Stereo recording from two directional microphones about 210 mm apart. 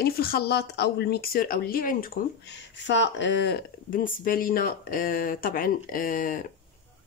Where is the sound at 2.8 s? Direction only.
60° left (ahead or behind).